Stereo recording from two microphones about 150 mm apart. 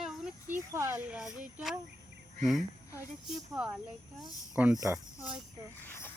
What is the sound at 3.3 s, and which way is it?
Speech, 5° right (ahead or behind).